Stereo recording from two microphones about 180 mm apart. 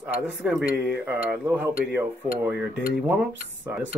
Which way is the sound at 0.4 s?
Centre (ahead or behind).